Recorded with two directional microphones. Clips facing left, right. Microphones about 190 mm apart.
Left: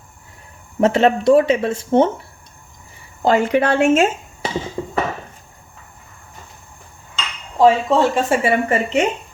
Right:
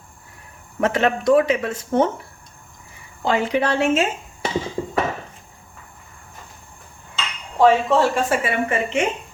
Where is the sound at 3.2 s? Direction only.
45° left (ahead or behind).